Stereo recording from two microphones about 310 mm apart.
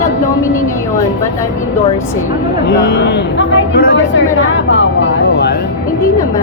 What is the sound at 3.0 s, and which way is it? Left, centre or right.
Speech, left.